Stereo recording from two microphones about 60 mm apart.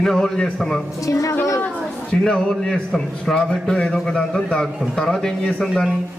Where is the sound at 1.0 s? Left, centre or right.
Left.